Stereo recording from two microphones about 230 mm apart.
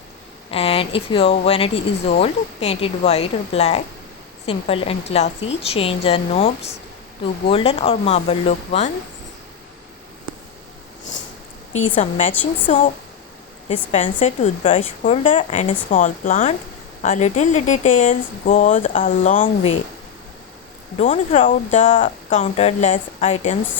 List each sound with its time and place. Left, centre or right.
0.5 s speech: left
11.7 s speech: left
13.9 s speech: left
21.0 s speech: left